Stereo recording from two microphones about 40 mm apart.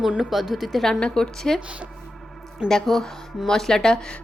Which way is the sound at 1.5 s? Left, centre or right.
Right.